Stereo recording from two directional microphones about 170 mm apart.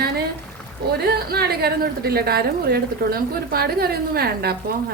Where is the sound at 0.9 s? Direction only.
70° right (ahead or behind).